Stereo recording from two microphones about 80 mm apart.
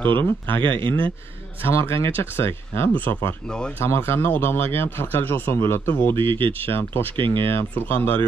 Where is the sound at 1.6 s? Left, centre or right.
Left.